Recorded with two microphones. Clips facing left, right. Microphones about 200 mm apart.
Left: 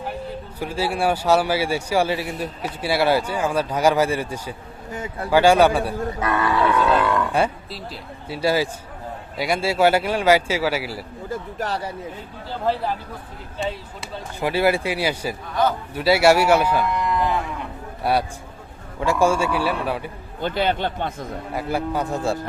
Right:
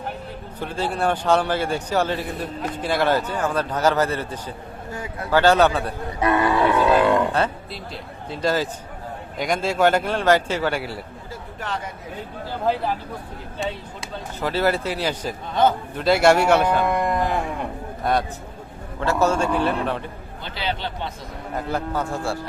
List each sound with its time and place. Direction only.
0.6 s a man's voice: 10° left (ahead or behind)
4.9 s speech: 25° left (ahead or behind)
5.3 s a man's voice: 10° left (ahead or behind)
6.2 s cattle: 25° right (ahead or behind)
8.3 s a man's voice: 10° left (ahead or behind)
11.3 s speech: 40° left (ahead or behind)
13.6 s speech: centre (ahead or behind)
14.4 s a man's voice: 10° left (ahead or behind)
15.6 s cattle: 20° right (ahead or behind)
16.0 s a man's voice: 5° left (ahead or behind)
16.8 s livestock: 50° right (ahead or behind)
18.0 s a man's voice: 10° left (ahead or behind)
20.4 s speech: 50° left (ahead or behind)
21.5 s a man's voice: 10° left (ahead or behind)